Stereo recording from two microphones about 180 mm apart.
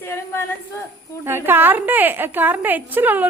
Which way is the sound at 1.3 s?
10° right (ahead or behind).